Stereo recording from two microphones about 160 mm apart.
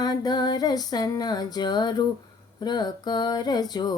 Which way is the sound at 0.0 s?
25° left (ahead or behind).